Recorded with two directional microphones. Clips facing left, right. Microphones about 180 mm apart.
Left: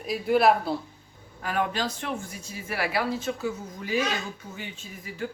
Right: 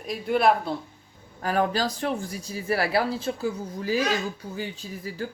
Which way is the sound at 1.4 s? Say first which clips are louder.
Right 4 dB; 40° right (ahead or behind).